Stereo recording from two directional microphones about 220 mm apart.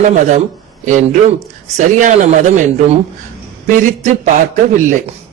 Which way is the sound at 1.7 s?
35° right (ahead or behind).